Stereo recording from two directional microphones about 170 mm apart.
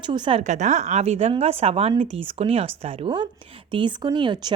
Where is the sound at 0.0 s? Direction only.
25° right (ahead or behind).